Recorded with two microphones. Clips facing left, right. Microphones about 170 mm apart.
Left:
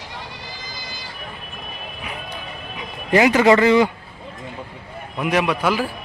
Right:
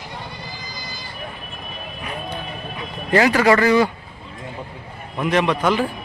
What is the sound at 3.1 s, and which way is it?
Speech, 20° left (ahead or behind).